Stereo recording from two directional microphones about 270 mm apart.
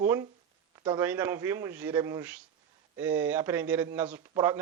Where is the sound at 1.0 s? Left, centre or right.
Centre.